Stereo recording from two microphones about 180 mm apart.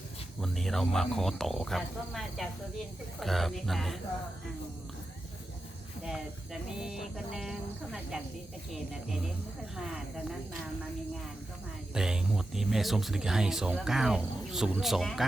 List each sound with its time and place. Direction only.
0.4 s speech: centre (ahead or behind)
6.0 s speech: centre (ahead or behind)
8.7 s speech: centre (ahead or behind)
11.9 s speech: 5° right (ahead or behind)